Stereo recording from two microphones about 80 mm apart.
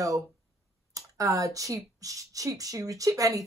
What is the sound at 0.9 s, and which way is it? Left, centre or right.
A woman's voice, right.